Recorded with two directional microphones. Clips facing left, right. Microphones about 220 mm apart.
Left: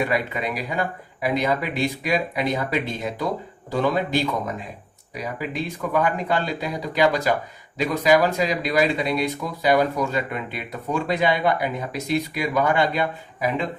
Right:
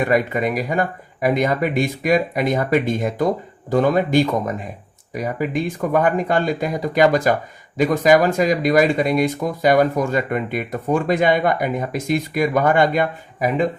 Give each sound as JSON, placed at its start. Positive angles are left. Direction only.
{"t": 0.1, "sound": "speech", "side_deg": -50}